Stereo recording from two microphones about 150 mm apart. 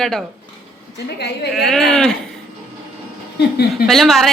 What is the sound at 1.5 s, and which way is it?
Speech, centre (ahead or behind).